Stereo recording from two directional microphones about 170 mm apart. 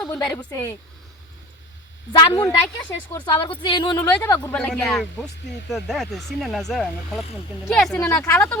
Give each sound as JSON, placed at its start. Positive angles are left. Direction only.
{"t": 0.1, "sound": "speech", "side_deg": 20}
{"t": 2.4, "sound": "speech", "side_deg": 20}
{"t": 4.2, "sound": "speech", "side_deg": 15}